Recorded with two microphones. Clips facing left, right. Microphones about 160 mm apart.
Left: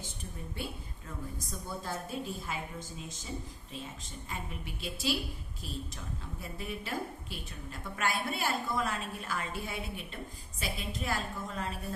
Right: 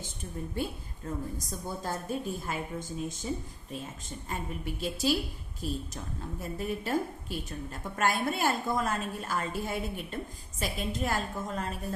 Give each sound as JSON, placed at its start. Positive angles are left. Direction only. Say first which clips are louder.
{"t": 0.5, "sound": "a woman's voice", "louder": "right 6 dB", "side_deg": -40}
{"t": 4.3, "sound": "a woman's voice", "louder": "right 6 dB", "side_deg": -45}